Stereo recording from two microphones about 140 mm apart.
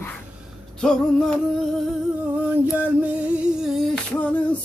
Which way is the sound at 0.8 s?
5° left (ahead or behind).